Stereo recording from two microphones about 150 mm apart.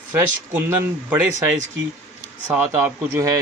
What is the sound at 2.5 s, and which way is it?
Speech, 15° right (ahead or behind).